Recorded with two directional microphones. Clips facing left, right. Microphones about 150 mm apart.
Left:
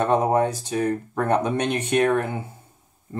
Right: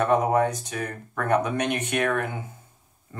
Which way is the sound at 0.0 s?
30° left (ahead or behind).